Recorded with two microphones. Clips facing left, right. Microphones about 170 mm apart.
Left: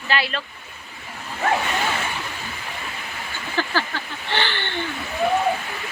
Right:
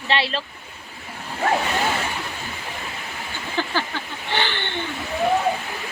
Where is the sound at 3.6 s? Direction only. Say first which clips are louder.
Left 1 dB; 15° right (ahead or behind).